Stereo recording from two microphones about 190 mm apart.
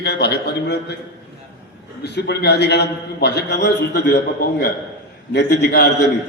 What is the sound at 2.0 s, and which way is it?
A man's voice, 60° left (ahead or behind).